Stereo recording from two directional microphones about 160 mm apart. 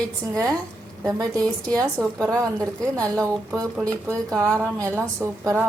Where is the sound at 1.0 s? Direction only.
20° right (ahead or behind).